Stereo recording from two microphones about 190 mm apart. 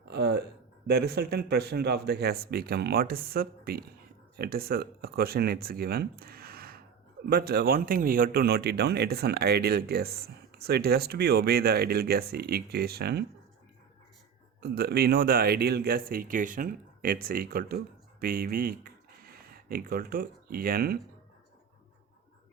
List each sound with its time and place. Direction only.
0.1 s a sound: 60° right (ahead or behind)
0.9 s speech: 55° right (ahead or behind)
14.6 s speech: 55° right (ahead or behind)